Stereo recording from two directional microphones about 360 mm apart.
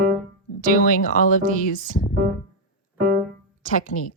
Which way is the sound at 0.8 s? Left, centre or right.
Left.